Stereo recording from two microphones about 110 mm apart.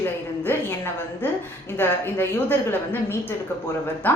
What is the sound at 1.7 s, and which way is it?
A woman's voice, 20° left (ahead or behind).